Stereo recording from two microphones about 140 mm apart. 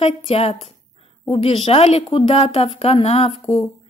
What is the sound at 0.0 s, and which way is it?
A woman's voice, 45° left (ahead or behind).